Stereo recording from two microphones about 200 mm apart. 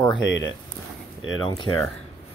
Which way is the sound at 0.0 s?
20° left (ahead or behind).